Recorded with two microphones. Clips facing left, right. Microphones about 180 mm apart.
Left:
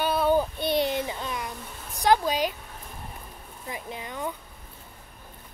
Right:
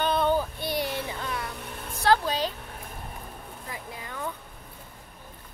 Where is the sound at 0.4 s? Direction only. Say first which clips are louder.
Left 5 dB; 20° left (ahead or behind).